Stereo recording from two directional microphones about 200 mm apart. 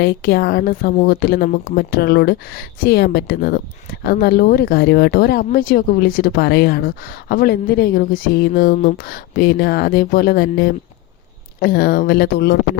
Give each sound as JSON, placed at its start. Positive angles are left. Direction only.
{"t": 0.0, "sound": "speech", "side_deg": 50}